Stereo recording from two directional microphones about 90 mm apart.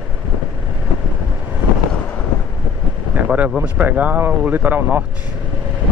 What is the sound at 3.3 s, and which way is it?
Speech, 10° right (ahead or behind).